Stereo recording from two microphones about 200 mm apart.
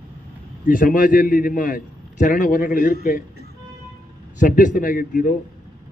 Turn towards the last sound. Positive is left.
turn(degrees=40)  # may be behind; listen again after turning